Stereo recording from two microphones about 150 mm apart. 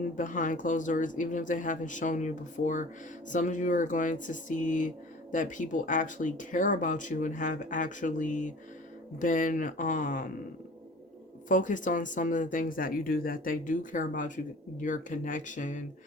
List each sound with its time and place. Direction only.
0.2 s speech: 60° left (ahead or behind)
11.4 s speech: 60° left (ahead or behind)